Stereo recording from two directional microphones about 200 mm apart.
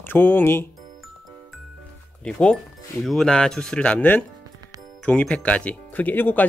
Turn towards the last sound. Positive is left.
turn(degrees=10)  # may be behind; listen again after turning